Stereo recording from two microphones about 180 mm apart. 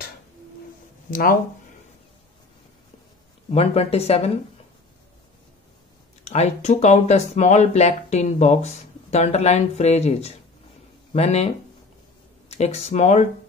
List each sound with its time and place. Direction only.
3.5 s speech: 35° left (ahead or behind)
6.2 s speech: 35° left (ahead or behind)